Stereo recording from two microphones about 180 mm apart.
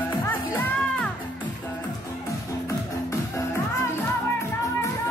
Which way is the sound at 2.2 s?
15° left (ahead or behind).